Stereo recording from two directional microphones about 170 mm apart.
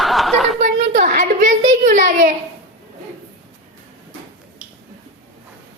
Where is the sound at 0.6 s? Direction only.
50° right (ahead or behind).